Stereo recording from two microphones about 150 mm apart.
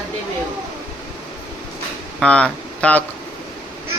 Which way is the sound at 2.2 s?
5° left (ahead or behind).